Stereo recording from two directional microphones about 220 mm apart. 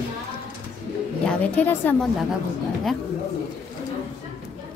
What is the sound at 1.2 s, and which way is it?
A woman's voice, 5° left (ahead or behind).